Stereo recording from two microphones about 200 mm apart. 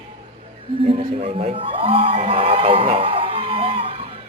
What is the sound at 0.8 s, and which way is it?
Crowd, 30° right (ahead or behind).